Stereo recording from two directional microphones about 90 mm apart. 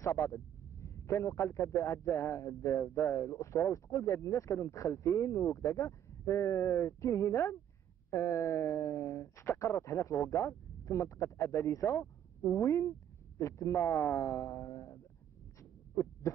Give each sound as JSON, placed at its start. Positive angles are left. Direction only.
{"t": 0.0, "sound": "speech", "side_deg": 35}
{"t": 16.0, "sound": "heart sounds", "side_deg": 35}